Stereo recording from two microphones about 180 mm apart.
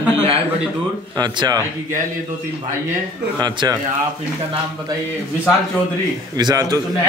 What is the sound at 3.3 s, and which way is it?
Speech, 25° right (ahead or behind).